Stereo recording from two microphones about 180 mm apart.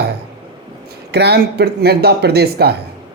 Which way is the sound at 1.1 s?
65° right (ahead or behind).